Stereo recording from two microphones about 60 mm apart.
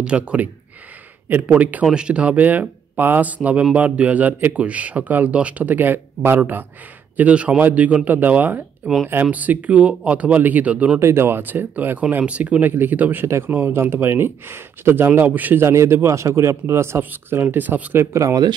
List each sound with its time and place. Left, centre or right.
0.0 s speech: centre
1.5 s speech: right
7.2 s speech: right
11.0 s speech: right
15.6 s a man's voice: right
17.0 s speech: right
17.9 s a man's voice: right